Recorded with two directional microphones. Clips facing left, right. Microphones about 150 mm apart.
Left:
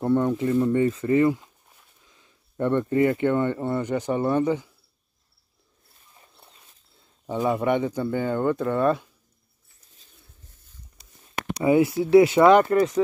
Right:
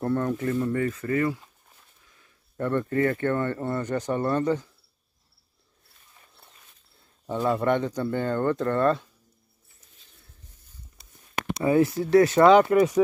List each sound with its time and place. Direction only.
0.0 s speech: 15° left (ahead or behind)
7.2 s speech: 10° left (ahead or behind)
11.6 s speech: 15° left (ahead or behind)
12.6 s speech: 10° right (ahead or behind)